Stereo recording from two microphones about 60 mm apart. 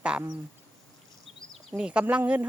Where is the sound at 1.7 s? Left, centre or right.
Centre.